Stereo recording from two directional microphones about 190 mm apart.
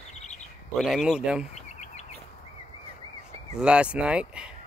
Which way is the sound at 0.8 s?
Centre (ahead or behind).